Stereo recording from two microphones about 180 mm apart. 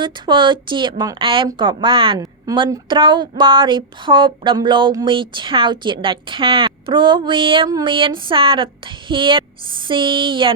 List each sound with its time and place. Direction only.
0.0 s speech: 25° right (ahead or behind)